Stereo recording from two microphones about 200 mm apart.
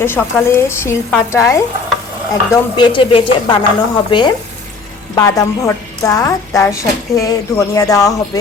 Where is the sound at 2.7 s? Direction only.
25° left (ahead or behind).